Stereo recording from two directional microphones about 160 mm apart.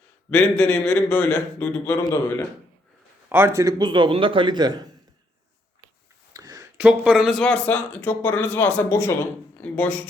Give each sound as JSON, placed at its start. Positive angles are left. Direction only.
{"t": 0.3, "sound": "speech", "side_deg": 5}
{"t": 3.2, "sound": "a man's voice", "side_deg": -15}
{"t": 6.3, "sound": "a sound", "side_deg": -25}
{"t": 6.7, "sound": "speech", "side_deg": -5}